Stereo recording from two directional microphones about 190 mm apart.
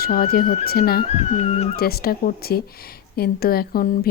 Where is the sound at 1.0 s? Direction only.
30° left (ahead or behind).